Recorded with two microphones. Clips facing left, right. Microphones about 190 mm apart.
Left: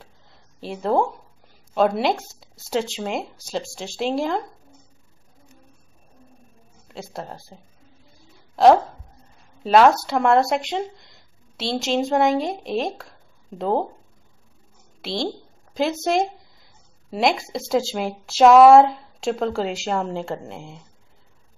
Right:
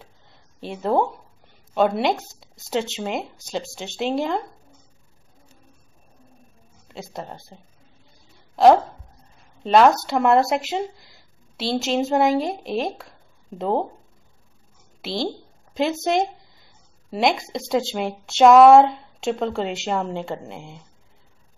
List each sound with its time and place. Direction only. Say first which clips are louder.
0.0 s a sound: even; centre (ahead or behind)
1.7 s speech: even; centre (ahead or behind)
6.9 s speech: even; centre (ahead or behind)
15.0 s a woman's voice: even; centre (ahead or behind)